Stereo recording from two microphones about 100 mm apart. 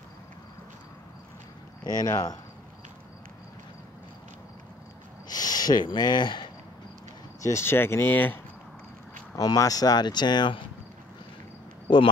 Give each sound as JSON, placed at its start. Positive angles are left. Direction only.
{"t": 1.9, "sound": "speech", "side_deg": 35}
{"t": 5.3, "sound": "speech", "side_deg": 40}
{"t": 7.4, "sound": "speech", "side_deg": 25}
{"t": 9.3, "sound": "speech", "side_deg": 35}
{"t": 11.9, "sound": "speech", "side_deg": 50}